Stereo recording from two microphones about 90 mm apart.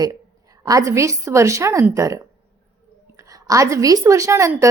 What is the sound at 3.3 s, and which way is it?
Speech, 40° right (ahead or behind).